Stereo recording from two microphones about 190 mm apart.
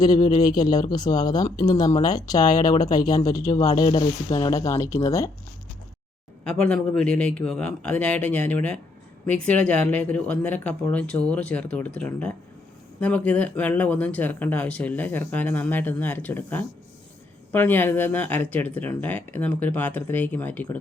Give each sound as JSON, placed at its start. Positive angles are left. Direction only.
{"t": 0.0, "sound": "speech", "side_deg": 20}
{"t": 6.4, "sound": "speech", "side_deg": 5}